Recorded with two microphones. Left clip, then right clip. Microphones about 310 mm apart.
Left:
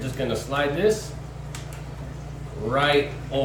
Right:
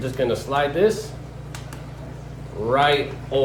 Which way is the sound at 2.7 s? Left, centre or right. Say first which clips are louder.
Right 2 dB; right.